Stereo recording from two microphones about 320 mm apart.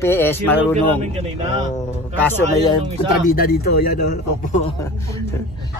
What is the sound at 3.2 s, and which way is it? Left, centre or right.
Speech, left.